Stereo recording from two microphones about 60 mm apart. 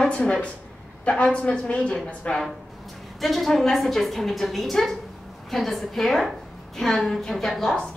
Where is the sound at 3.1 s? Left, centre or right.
Centre.